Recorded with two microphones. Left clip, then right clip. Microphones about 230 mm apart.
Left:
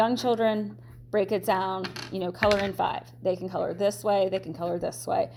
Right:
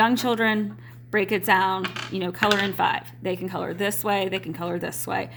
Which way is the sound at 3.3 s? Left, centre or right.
Right.